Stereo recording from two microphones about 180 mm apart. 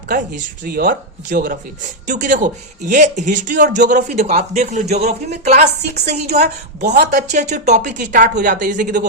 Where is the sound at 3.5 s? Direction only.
65° right (ahead or behind).